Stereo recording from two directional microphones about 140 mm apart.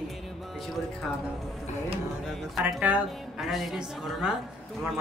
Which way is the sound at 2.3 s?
Centre (ahead or behind).